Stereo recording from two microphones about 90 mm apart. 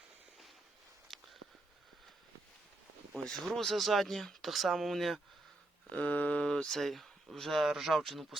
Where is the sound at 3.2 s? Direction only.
5° left (ahead or behind).